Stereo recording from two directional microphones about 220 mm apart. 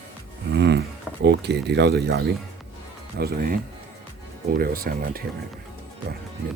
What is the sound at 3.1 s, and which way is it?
Speech, 45° right (ahead or behind).